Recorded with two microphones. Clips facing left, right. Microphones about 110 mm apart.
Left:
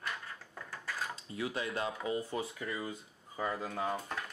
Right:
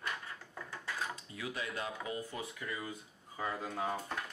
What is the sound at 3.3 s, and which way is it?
Speech, 5° left (ahead or behind).